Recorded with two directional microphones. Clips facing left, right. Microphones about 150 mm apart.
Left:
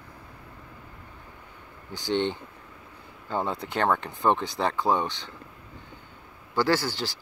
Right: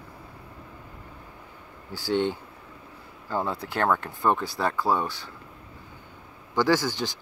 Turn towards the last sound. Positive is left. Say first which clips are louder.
# right 2 dB
turn(degrees=-15)  # may be behind; listen again after turning